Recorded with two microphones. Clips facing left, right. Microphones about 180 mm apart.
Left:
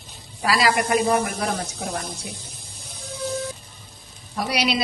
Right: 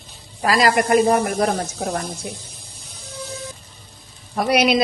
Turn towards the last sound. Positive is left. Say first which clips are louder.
# right 6 dB
turn(degrees=-50)  # may be behind; listen again after turning